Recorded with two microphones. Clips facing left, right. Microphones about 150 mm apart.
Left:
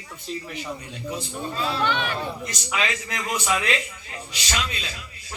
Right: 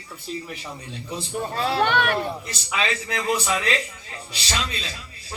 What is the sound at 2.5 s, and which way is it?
A man's voice, 30° right (ahead or behind).